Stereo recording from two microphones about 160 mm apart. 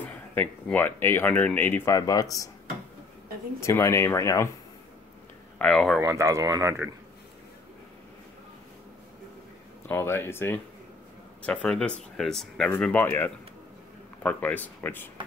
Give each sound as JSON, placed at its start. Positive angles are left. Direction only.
{"t": 0.0, "sound": "speech", "side_deg": 10}
{"t": 3.6, "sound": "speech", "side_deg": 15}
{"t": 5.6, "sound": "speech", "side_deg": 5}
{"t": 5.9, "sound": "speech", "side_deg": -20}
{"t": 9.8, "sound": "speech", "side_deg": 15}